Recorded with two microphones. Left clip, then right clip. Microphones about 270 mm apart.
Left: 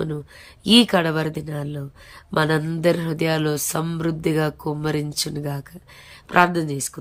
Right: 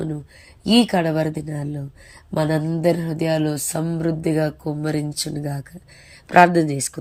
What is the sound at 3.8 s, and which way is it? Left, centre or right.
Speech, left.